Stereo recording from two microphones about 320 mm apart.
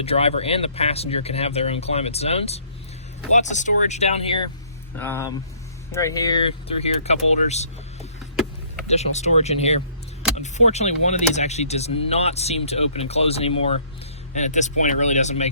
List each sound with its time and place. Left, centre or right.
0.0 s speech: centre
4.9 s speech: centre
8.9 s speech: left